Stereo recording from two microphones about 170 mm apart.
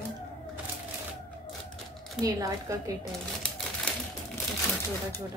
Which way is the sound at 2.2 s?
20° right (ahead or behind).